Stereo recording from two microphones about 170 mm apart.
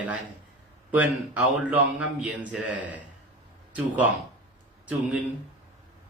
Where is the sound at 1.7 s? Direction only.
10° right (ahead or behind).